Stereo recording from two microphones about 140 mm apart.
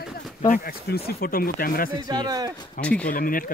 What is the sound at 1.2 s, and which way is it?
Speech, 90° left.